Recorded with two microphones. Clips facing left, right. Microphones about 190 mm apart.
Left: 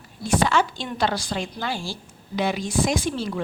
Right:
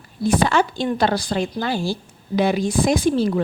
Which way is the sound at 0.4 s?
50° right (ahead or behind).